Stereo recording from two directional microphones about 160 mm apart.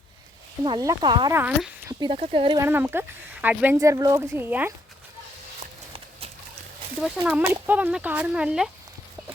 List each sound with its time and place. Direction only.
0.6 s speech: 25° right (ahead or behind)
1.4 s speech: 10° right (ahead or behind)
1.9 s speech: 30° right (ahead or behind)
2.6 s speech: 15° right (ahead or behind)
3.8 s speech: 20° right (ahead or behind)
5.5 s clip-clop: 40° right (ahead or behind)
7.0 s speech: 5° right (ahead or behind)